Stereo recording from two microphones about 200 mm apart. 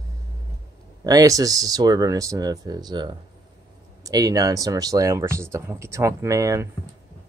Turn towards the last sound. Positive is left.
turn(degrees=-15)  # may be behind; listen again after turning